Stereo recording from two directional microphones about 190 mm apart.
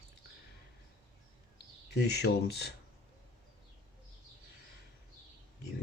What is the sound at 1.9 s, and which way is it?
Speech, 60° left (ahead or behind).